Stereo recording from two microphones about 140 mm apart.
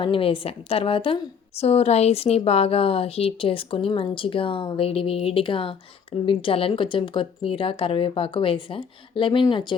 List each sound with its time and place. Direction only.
0.0 s a woman's voice: 40° left (ahead or behind)